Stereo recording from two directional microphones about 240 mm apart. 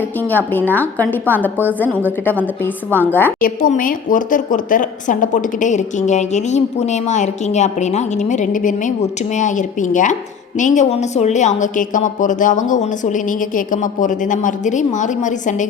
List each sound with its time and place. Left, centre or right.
0.2 s a woman's voice: centre
3.1 s a woman's voice: centre
3.4 s a woman's voice: left